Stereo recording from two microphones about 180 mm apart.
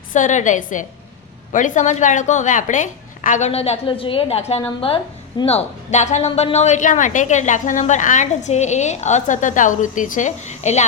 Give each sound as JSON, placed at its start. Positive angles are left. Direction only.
{"t": 0.1, "sound": "a woman's voice", "side_deg": 45}